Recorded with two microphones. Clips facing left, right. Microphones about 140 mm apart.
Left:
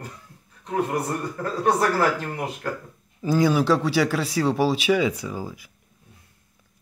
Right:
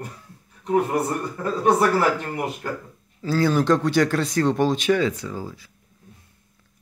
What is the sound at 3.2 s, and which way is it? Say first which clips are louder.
Speech: even; 15° left (ahead or behind).